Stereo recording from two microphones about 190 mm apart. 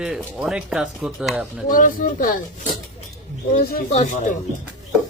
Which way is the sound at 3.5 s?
50° left (ahead or behind).